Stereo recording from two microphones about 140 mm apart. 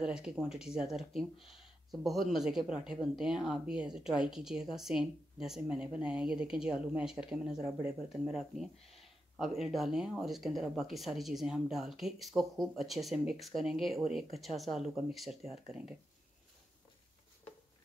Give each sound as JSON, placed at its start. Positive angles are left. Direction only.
{"t": 0.0, "sound": "speech", "side_deg": -5}